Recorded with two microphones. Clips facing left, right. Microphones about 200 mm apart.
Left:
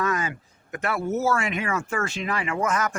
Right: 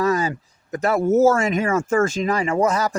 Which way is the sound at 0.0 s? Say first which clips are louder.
Right 6 dB; 35° right (ahead or behind).